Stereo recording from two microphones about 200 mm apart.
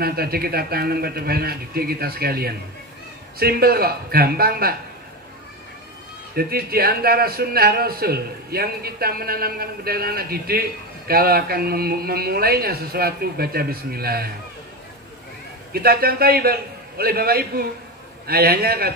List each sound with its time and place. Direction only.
0.0 s a man's voice: 50° right (ahead or behind)
6.3 s a man's voice: 50° right (ahead or behind)
15.7 s a man's voice: 50° right (ahead or behind)